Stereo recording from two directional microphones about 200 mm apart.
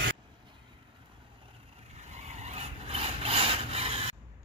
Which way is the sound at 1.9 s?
35° right (ahead or behind).